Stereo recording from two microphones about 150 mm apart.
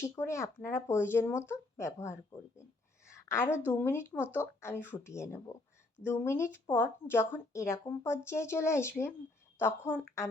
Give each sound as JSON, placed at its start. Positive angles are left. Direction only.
{"t": 0.0, "sound": "a woman's voice", "side_deg": 20}
{"t": 3.1, "sound": "a sound", "side_deg": 20}
{"t": 3.7, "sound": "a woman's voice", "side_deg": 15}